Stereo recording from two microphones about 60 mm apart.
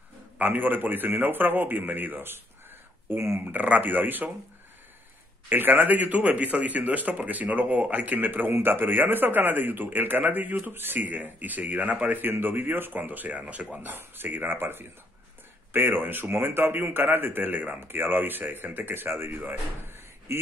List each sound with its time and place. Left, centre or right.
0.4 s speech: right
3.2 s speech: right
3.4 s speech: right
5.5 s speech: right
13.9 s speech: right